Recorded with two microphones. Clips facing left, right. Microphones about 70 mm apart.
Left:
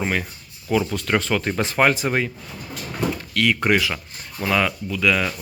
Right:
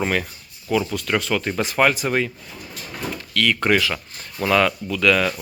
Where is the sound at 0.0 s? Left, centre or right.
Centre.